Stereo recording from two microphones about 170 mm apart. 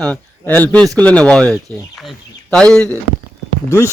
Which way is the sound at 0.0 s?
10° left (ahead or behind).